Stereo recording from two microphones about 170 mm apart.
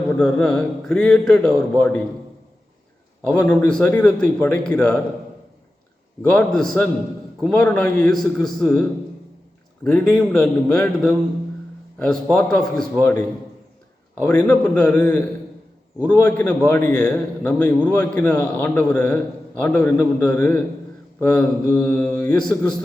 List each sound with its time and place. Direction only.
0.2 s a man's voice: 5° left (ahead or behind)
3.2 s a man's voice: 10° left (ahead or behind)
6.2 s a man's voice: 5° left (ahead or behind)